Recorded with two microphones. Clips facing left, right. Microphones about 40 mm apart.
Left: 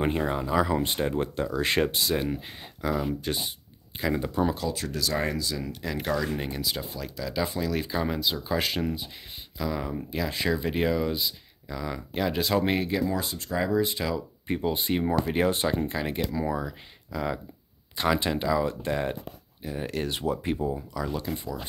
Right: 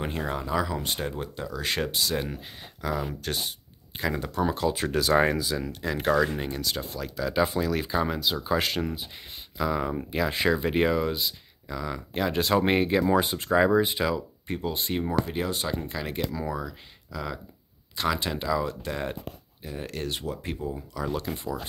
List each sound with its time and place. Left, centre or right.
0.0 s speech: centre
0.7 s speech: centre
1.1 s speech: left
2.1 s speech: centre
4.8 s speech: right
5.6 s speech: centre
7.2 s speech: centre
9.6 s speech: centre
12.6 s speech: right
13.8 s speech: centre
14.5 s speech: centre
15.2 s speech: left
16.0 s speech: centre
21.0 s speech: centre